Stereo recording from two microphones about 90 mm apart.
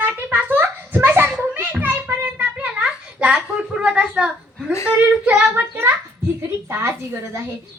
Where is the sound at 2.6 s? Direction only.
10° right (ahead or behind).